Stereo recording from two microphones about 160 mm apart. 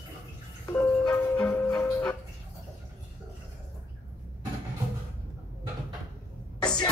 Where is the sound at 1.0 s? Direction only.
5° left (ahead or behind).